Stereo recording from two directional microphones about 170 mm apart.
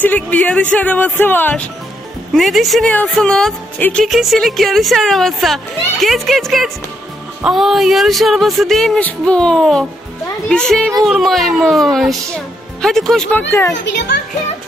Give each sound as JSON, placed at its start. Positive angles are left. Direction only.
{"t": 0.0, "sound": "speech", "side_deg": 10}
{"t": 13.9, "sound": "a child's voice", "side_deg": 90}